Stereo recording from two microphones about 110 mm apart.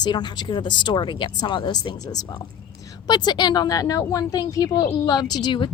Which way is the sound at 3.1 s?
40° left (ahead or behind).